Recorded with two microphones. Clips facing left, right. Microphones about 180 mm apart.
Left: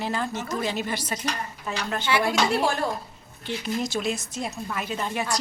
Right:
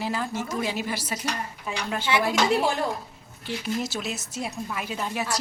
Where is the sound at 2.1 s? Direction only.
20° right (ahead or behind).